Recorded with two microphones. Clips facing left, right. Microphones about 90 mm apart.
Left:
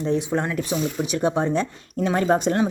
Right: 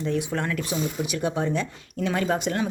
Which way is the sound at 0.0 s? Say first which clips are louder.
Left 4 dB; 25° left (ahead or behind).